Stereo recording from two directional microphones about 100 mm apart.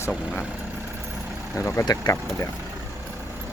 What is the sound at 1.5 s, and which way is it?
Speech, 30° left (ahead or behind).